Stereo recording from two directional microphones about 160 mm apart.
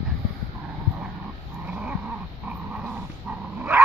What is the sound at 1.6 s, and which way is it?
Dog, 10° right (ahead or behind).